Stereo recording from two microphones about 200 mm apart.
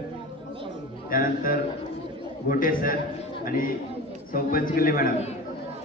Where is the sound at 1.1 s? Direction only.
45° left (ahead or behind).